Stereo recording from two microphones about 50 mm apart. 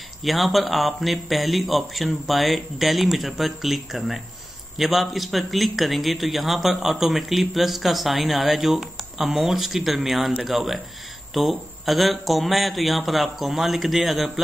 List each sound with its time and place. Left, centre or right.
0.2 s a man's voice: centre